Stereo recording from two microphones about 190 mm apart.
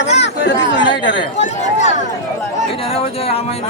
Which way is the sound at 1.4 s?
40° left (ahead or behind).